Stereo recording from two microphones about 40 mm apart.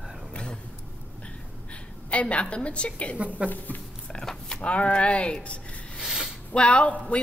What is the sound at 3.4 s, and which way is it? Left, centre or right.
Speech, left.